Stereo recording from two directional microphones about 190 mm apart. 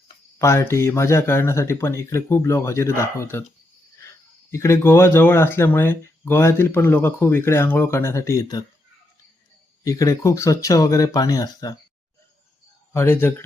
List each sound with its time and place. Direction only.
0.3 s speech: 15° left (ahead or behind)
4.5 s speech: 15° left (ahead or behind)
9.8 s speech: 20° left (ahead or behind)
12.9 s speech: 15° left (ahead or behind)